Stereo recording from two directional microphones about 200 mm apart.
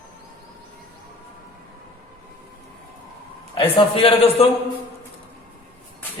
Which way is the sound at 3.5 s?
25° left (ahead or behind).